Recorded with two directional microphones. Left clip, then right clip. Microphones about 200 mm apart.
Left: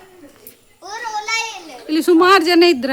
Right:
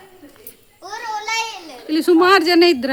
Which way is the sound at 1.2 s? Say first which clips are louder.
Left 1 dB; 10° right (ahead or behind).